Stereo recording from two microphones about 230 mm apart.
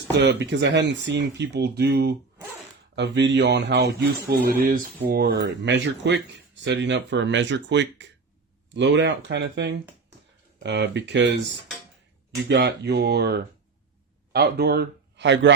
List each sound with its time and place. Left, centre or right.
0.2 s speech: right
12.5 s speech: right